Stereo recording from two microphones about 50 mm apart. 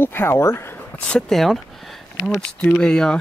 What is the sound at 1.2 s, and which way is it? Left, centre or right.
Speech, centre.